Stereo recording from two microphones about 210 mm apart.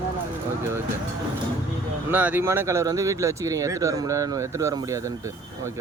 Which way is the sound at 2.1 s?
10° right (ahead or behind).